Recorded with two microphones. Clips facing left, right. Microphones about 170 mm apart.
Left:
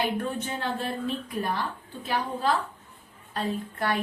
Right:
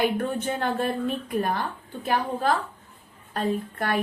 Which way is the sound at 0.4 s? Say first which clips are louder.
Right 5 dB; 55° right (ahead or behind).